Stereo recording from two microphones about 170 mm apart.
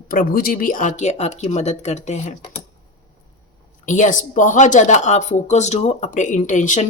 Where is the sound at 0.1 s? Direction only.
55° left (ahead or behind).